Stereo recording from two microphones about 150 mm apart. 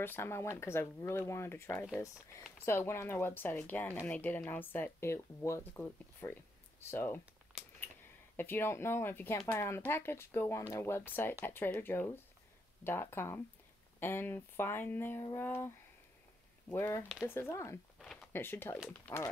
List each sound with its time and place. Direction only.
0.0 s speech: 15° left (ahead or behind)
8.4 s speech: 15° left (ahead or behind)
16.7 s speech: 15° left (ahead or behind)
17.9 s a sound: centre (ahead or behind)
18.3 s speech: 15° left (ahead or behind)